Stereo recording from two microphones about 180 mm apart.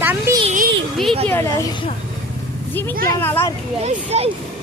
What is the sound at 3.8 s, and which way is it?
Speech, 35° right (ahead or behind).